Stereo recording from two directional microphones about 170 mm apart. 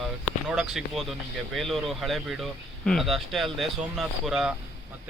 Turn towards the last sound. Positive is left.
turn(degrees=-5)  # may be behind; listen again after turning